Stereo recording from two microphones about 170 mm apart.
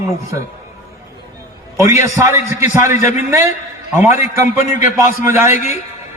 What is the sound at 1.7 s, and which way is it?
Speech, 20° right (ahead or behind).